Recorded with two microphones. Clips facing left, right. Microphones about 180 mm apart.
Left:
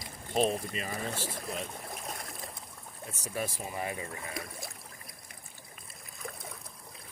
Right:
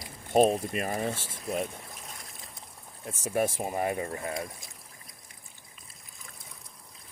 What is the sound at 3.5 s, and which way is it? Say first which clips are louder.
Speech: right 7 dB; 50° right (ahead or behind).